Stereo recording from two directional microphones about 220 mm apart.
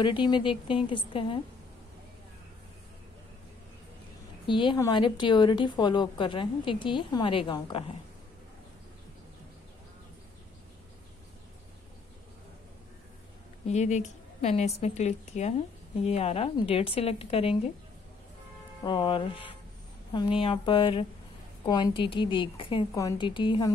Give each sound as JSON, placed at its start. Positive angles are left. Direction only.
{"t": 0.0, "sound": "a woman's voice", "side_deg": 20}
{"t": 4.5, "sound": "a woman's voice", "side_deg": 20}
{"t": 13.7, "sound": "a woman's voice", "side_deg": 30}
{"t": 18.9, "sound": "a woman's voice", "side_deg": 20}